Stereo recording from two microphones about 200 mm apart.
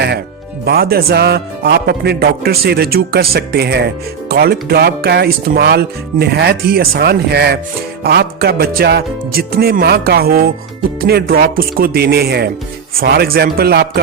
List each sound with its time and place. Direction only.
0.6 s a man's voice: 50° right (ahead or behind)